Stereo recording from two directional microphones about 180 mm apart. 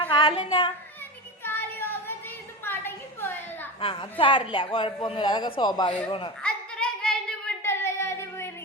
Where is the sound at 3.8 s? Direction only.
30° left (ahead or behind).